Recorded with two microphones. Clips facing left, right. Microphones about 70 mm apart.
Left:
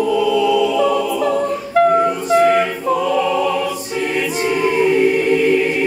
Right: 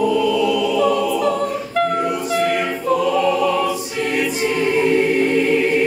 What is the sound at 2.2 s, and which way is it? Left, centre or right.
Choir, centre.